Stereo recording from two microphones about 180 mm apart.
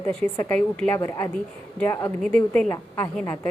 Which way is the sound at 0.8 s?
15° left (ahead or behind).